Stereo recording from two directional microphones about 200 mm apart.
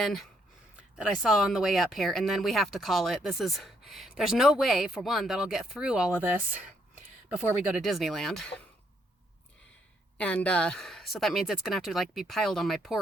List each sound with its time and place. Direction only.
0.0 s speech: centre (ahead or behind)
10.2 s speech: 5° left (ahead or behind)